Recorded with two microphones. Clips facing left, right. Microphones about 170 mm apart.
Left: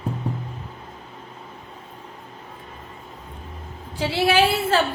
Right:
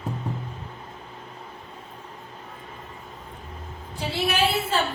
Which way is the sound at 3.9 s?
90° left.